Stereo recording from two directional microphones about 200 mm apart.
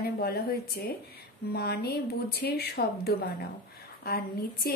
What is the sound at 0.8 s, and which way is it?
Speech, 50° left (ahead or behind).